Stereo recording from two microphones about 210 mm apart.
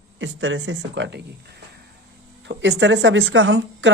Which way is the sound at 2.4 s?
55° right (ahead or behind).